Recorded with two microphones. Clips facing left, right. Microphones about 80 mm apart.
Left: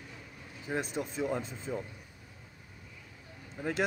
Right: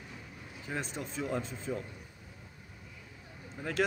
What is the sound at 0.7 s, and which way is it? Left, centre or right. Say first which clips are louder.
Speech: left 4 dB; centre.